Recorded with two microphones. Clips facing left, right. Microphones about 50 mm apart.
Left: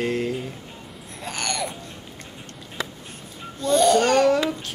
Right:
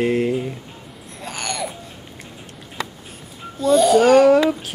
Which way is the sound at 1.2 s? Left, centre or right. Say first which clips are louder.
Right 1 dB; centre.